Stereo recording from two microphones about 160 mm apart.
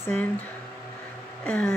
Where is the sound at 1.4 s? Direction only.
10° left (ahead or behind).